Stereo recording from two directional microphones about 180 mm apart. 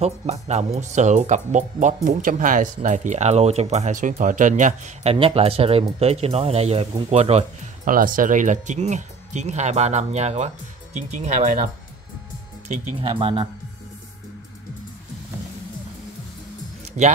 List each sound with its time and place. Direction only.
0.0 s speech: 35° right (ahead or behind)
5.1 s speech: 30° right (ahead or behind)
7.8 s speech: 50° right (ahead or behind)
12.6 s speech: 35° right (ahead or behind)